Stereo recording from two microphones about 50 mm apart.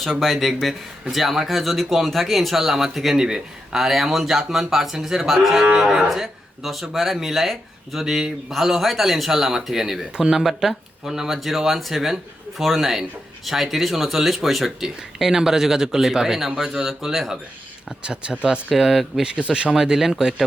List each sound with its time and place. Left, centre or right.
0.0 s speech: centre
18.0 s speech: right
18.7 s speech: centre